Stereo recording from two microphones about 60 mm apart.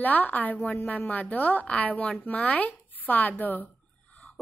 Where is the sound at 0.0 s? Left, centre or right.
Left.